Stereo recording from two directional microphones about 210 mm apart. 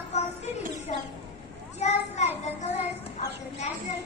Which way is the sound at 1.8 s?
35° left (ahead or behind).